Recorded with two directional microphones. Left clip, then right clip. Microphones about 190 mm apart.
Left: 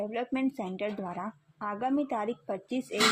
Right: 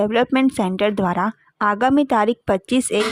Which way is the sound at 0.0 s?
40° right (ahead or behind).